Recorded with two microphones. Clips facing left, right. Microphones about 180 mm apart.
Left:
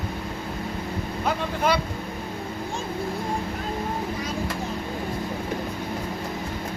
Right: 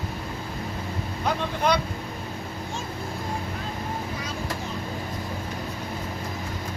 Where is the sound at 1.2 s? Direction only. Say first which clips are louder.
Even; 5° left (ahead or behind).